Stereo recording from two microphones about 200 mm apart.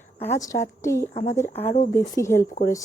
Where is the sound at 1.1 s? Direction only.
35° left (ahead or behind).